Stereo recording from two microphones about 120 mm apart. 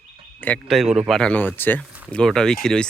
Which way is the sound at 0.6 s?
Centre (ahead or behind).